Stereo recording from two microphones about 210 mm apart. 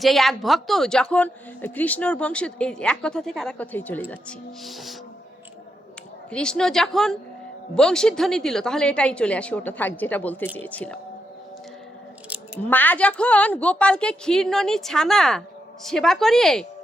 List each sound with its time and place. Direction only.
0.0 s a woman's voice: centre (ahead or behind)
6.3 s a woman's voice: 5° left (ahead or behind)
12.6 s a woman's voice: 10° left (ahead or behind)